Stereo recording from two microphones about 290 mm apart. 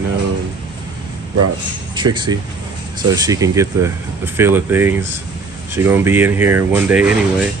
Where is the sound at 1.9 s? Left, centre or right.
Centre.